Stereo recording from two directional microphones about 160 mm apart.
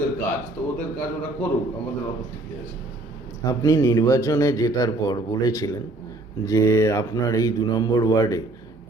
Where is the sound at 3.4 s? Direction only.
20° left (ahead or behind).